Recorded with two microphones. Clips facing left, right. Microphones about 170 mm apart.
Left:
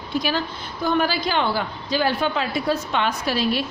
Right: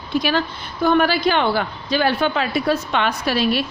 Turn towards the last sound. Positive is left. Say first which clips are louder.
# right 3 dB
turn(degrees=-70)  # may be behind; listen again after turning